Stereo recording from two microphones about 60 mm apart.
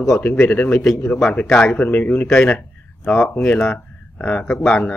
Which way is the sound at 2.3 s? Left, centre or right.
Centre.